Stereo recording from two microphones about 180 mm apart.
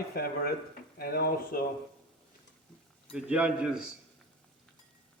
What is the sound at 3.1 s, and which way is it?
Speech, 5° right (ahead or behind).